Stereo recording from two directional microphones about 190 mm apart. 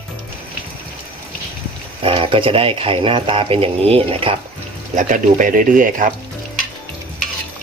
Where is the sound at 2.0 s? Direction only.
30° right (ahead or behind).